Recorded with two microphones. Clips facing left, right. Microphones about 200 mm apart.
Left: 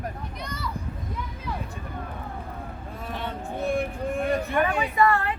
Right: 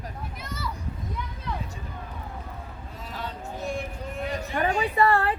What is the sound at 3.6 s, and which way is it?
Speech, 55° left (ahead or behind).